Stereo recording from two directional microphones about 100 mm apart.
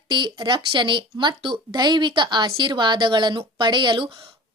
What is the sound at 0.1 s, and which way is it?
A woman's voice, 50° right (ahead or behind).